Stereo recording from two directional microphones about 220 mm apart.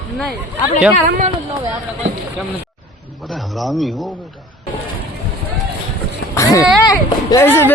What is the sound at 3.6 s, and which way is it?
Speech, centre (ahead or behind).